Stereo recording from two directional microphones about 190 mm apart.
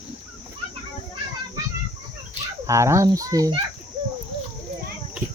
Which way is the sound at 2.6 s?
15° right (ahead or behind).